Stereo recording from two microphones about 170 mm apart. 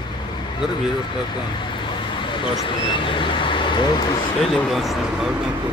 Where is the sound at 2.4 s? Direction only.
30° left (ahead or behind).